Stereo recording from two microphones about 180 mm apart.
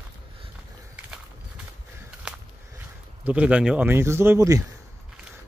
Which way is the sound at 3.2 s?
5° right (ahead or behind).